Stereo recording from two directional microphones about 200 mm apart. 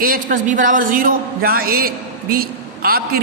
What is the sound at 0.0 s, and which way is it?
A man's voice, 45° right (ahead or behind).